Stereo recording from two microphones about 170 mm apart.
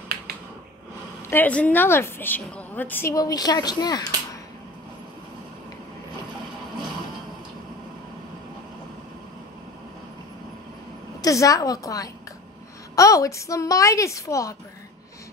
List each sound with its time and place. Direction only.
1.3 s a woman's voice: 10° left (ahead or behind)
11.1 s a woman's voice: 20° left (ahead or behind)